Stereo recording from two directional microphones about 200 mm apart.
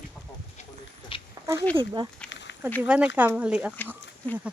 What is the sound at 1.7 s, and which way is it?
Speech, 20° right (ahead or behind).